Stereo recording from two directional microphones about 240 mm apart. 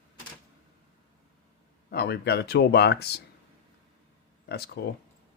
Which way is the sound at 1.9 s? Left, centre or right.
Left.